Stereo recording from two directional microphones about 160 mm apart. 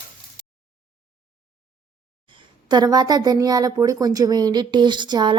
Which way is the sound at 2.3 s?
25° right (ahead or behind).